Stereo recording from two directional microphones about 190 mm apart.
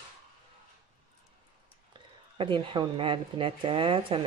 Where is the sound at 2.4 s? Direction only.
25° right (ahead or behind).